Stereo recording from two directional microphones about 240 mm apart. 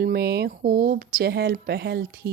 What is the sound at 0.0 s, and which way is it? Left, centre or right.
Speech, right.